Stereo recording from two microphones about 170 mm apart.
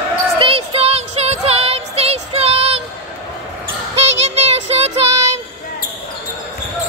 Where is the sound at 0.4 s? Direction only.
35° right (ahead or behind).